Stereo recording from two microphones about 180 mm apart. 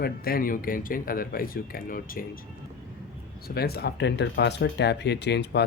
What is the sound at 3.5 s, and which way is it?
Speech, 60° left (ahead or behind).